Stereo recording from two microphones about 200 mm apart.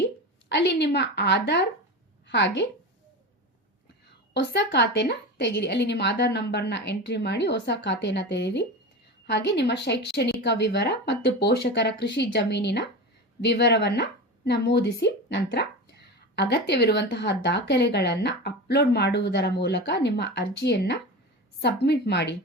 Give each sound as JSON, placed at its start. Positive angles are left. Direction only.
{"t": 0.4, "sound": "a woman's voice", "side_deg": 60}
{"t": 4.4, "sound": "a woman's voice", "side_deg": 60}